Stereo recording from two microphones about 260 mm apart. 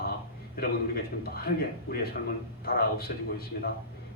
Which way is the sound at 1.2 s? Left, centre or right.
Left.